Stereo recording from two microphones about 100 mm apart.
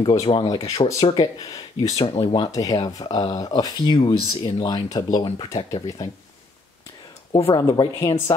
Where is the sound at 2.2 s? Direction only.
60° left (ahead or behind).